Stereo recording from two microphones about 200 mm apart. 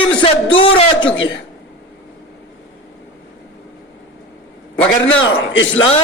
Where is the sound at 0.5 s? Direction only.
25° left (ahead or behind).